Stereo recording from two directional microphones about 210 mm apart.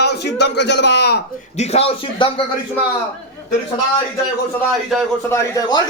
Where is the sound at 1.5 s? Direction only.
30° left (ahead or behind).